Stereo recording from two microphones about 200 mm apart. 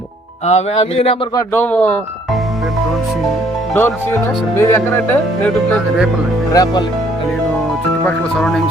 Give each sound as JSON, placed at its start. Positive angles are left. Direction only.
{"t": 0.4, "sound": "speech", "side_deg": 30}
{"t": 1.4, "sound": "speech", "side_deg": 10}
{"t": 3.8, "sound": "speech", "side_deg": 10}
{"t": 8.0, "sound": "speech", "side_deg": 0}